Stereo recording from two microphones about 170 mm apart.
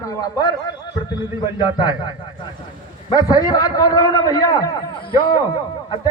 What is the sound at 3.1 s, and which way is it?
A man's voice, 20° left (ahead or behind).